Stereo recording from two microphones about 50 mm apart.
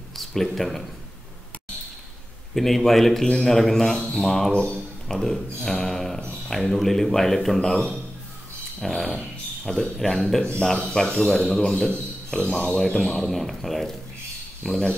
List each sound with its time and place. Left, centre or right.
0.1 s speech: centre
2.5 s speech: centre
4.5 s a man's voice: left
5.0 s speech: centre
10.8 s a man's voice: left
11.1 s speech: centre